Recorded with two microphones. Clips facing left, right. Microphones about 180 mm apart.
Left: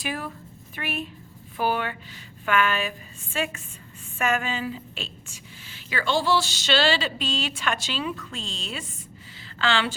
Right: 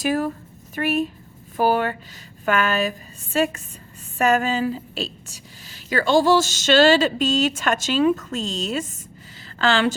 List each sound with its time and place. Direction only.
0.0 s a woman's voice: 45° right (ahead or behind)